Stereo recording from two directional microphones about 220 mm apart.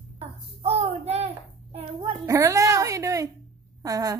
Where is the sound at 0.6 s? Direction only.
30° right (ahead or behind).